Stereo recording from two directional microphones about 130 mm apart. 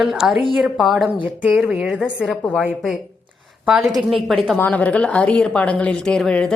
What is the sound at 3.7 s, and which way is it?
A woman's voice, 5° right (ahead or behind).